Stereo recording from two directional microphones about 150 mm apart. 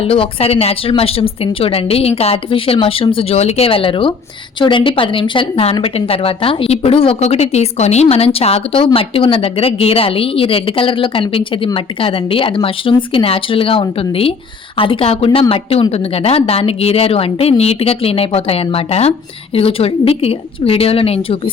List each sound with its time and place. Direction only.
0.0 s a woman's voice: 40° left (ahead or behind)